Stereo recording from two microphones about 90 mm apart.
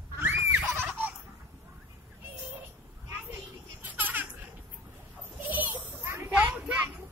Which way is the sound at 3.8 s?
20° right (ahead or behind).